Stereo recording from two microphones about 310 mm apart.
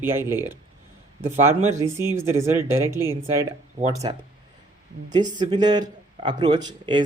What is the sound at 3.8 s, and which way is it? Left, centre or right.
Speech, centre.